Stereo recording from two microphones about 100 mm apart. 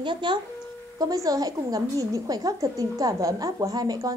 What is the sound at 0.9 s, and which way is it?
A woman's voice, 35° right (ahead or behind).